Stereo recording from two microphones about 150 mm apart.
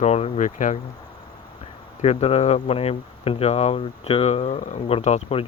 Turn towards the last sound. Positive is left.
turn(degrees=45)  # may be behind; listen again after turning